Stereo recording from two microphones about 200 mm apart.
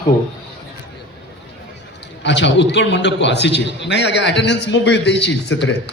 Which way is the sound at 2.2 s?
60° left (ahead or behind).